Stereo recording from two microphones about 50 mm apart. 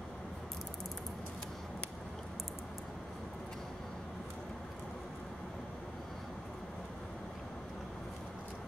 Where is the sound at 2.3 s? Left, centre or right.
Centre.